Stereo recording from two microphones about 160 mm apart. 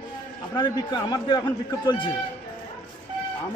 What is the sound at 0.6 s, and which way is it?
Speech, 30° left (ahead or behind).